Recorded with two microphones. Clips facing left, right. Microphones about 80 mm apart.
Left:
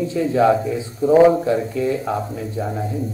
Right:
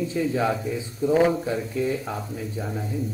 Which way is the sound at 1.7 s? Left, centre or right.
Left.